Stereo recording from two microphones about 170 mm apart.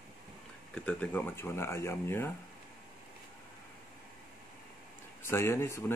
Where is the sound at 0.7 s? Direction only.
5° left (ahead or behind).